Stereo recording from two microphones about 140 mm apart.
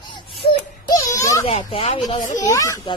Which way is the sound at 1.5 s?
45° left (ahead or behind).